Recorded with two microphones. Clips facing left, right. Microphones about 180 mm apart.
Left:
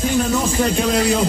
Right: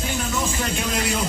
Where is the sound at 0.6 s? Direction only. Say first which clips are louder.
Left 8 dB; 35° left (ahead or behind).